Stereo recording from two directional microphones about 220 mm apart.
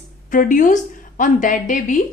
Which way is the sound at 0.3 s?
35° left (ahead or behind).